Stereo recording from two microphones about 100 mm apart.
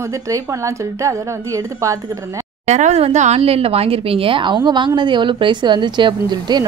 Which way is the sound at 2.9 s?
90° right.